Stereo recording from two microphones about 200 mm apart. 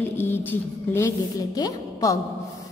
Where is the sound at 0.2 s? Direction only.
10° left (ahead or behind).